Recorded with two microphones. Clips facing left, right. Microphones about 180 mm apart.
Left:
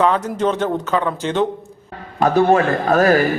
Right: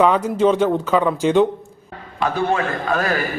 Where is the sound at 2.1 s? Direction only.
40° left (ahead or behind).